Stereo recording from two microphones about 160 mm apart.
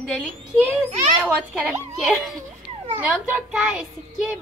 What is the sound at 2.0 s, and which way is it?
A woman's voice, centre (ahead or behind).